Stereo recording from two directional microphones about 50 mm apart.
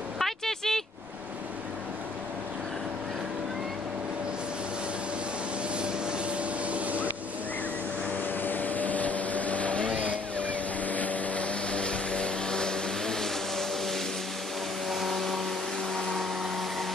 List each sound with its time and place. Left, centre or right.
0.2 s a sound: centre
5.8 s vehicle: right
8.4 s vehicle: left; by 15.4 s centre